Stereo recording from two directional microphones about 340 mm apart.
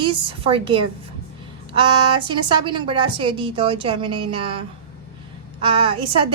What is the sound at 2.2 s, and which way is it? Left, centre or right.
A woman's voice, centre.